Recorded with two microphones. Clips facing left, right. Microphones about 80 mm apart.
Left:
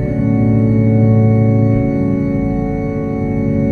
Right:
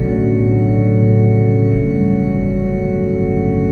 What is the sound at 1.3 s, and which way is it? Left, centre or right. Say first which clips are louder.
Music: left 1 dB; centre.